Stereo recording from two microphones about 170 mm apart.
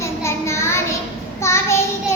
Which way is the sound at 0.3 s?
15° left (ahead or behind).